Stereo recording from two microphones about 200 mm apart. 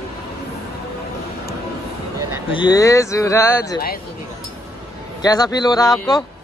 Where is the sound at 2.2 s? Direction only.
15° right (ahead or behind).